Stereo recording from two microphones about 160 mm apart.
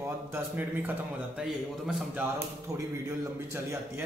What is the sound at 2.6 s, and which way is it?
Speech, 15° right (ahead or behind).